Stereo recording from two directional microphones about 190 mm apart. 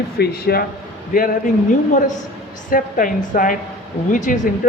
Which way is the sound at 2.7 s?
45° left (ahead or behind).